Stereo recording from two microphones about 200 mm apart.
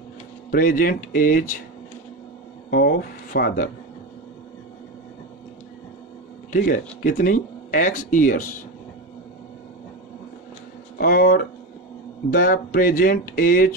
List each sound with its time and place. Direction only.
0.5 s speech: 45° left (ahead or behind)
2.7 s speech: 50° left (ahead or behind)
6.5 s speech: 45° left (ahead or behind)
11.0 s speech: 50° left (ahead or behind)